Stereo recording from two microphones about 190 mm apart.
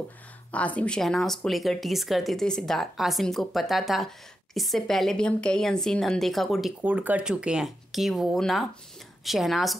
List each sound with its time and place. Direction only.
0.5 s a woman's voice: 5° left (ahead or behind)